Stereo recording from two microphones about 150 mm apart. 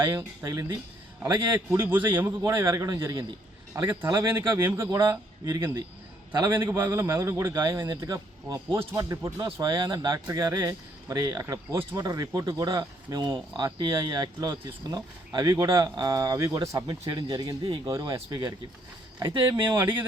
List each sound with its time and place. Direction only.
0.0 s speech: 15° right (ahead or behind)
6.6 s speech: 15° right (ahead or behind)